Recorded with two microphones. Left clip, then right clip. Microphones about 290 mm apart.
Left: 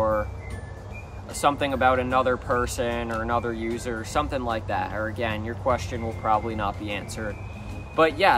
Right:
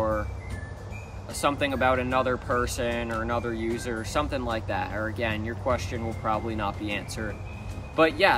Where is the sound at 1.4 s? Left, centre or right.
Centre.